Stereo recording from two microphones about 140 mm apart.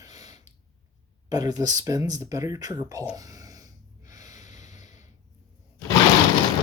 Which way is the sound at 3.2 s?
25° right (ahead or behind).